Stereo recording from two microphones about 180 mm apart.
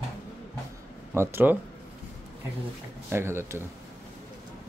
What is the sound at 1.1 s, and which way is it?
Speech, 15° right (ahead or behind).